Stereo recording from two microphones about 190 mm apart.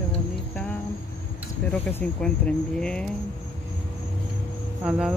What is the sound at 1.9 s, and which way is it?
Music, 5° left (ahead or behind).